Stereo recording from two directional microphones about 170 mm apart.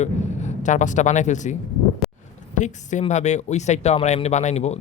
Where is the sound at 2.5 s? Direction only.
45° left (ahead or behind).